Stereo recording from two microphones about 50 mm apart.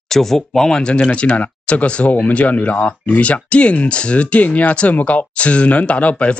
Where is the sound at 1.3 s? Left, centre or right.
Left.